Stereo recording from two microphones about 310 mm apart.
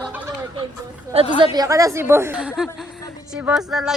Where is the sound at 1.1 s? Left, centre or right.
Centre.